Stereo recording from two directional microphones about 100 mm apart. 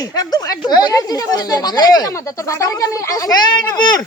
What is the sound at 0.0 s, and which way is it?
A man's voice, 40° left (ahead or behind).